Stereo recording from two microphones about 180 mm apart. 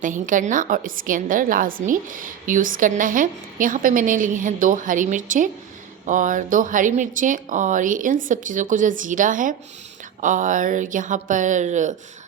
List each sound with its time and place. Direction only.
0.0 s a woman's voice: 45° right (ahead or behind)